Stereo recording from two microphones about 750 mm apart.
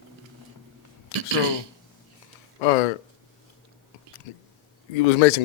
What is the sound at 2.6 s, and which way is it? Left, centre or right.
Speech, left.